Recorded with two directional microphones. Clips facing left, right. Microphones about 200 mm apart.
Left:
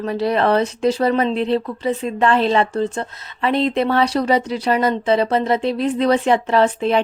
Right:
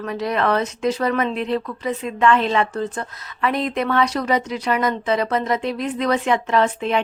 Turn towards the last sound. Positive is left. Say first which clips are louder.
# left 3 dB
turn(degrees=35)  # may be behind; listen again after turning